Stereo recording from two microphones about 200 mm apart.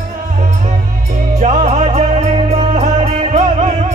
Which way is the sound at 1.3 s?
35° right (ahead or behind).